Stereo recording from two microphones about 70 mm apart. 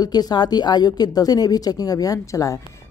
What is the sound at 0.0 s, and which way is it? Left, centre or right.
A woman's voice, left.